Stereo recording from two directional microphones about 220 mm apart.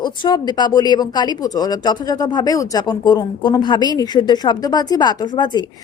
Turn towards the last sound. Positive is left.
turn(degrees=20)  # may be behind; listen again after turning